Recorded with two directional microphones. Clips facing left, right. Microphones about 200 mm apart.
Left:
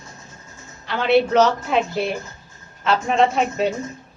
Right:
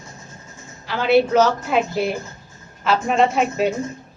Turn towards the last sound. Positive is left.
turn(degrees=-5)  # may be behind; listen again after turning